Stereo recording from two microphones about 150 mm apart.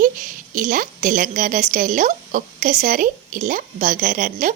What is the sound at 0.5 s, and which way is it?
Speech, 60° right (ahead or behind).